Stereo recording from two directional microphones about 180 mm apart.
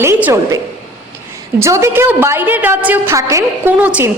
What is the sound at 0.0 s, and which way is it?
A woman's voice, 10° right (ahead or behind).